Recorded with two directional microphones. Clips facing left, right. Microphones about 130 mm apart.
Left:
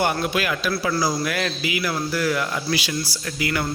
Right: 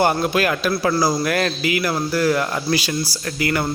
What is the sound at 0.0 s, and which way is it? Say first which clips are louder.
Speech: right 4 dB; 40° right (ahead or behind).